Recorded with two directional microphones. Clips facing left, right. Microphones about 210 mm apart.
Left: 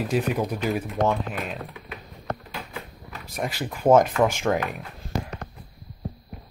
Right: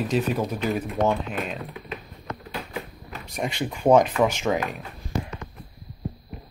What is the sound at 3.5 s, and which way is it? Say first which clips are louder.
Speech: even; 5° left (ahead or behind).